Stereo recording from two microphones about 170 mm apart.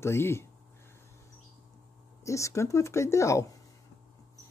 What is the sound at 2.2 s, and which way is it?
Speech, 20° left (ahead or behind).